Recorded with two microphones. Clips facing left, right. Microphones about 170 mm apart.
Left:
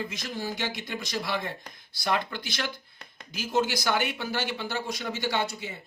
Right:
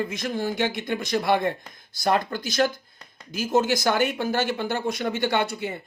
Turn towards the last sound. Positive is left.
turn(degrees=-55)  # may be behind; listen again after turning